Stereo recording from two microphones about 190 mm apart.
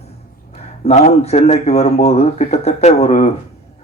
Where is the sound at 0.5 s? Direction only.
35° left (ahead or behind).